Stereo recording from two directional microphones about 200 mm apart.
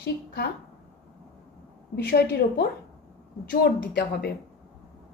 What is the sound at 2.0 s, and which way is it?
A woman's voice, 50° left (ahead or behind).